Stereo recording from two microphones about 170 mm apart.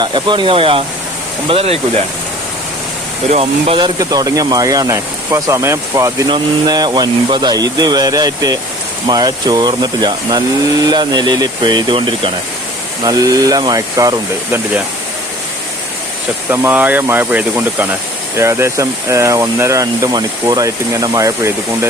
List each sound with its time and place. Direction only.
0.0 s speech: 25° right (ahead or behind)
3.2 s speech: 35° right (ahead or behind); by 14.6 s 20° right (ahead or behind)
16.5 s speech: 10° right (ahead or behind)